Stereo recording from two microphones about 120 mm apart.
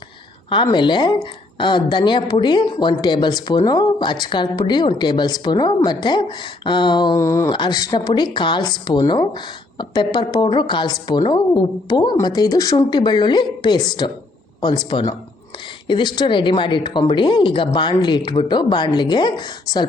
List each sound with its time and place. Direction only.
0.5 s speech: 40° left (ahead or behind)
7.2 s speech: 25° left (ahead or behind)
7.5 s speech: 40° left (ahead or behind)